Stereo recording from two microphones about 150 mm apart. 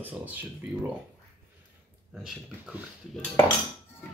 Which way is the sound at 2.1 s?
5° right (ahead or behind).